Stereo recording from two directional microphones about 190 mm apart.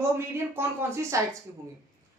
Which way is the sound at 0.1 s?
15° right (ahead or behind).